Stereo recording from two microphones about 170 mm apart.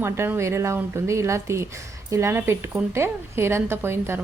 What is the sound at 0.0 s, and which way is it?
Speech, 15° right (ahead or behind).